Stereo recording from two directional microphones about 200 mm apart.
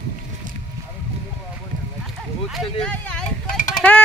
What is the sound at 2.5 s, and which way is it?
Speech, centre (ahead or behind).